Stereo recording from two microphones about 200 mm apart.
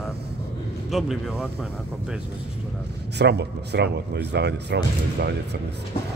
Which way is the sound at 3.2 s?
60° right (ahead or behind).